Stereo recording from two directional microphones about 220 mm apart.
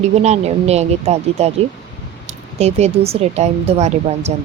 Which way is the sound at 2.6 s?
30° right (ahead or behind).